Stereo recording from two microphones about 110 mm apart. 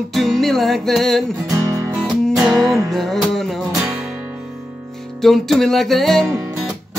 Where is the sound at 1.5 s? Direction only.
30° right (ahead or behind).